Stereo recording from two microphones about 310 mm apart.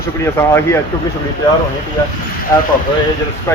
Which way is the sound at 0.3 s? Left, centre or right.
Centre.